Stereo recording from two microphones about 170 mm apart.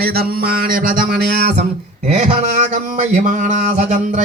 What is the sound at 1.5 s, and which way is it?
Speech, 40° right (ahead or behind).